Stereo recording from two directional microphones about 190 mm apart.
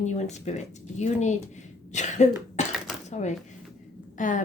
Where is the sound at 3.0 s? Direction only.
35° left (ahead or behind).